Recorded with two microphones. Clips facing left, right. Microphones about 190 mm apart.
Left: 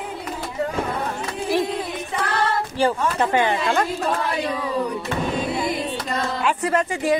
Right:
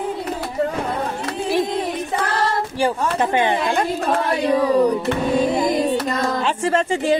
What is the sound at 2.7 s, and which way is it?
Speech, 15° right (ahead or behind).